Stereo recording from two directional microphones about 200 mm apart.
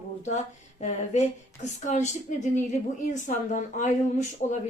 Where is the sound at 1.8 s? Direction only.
35° left (ahead or behind).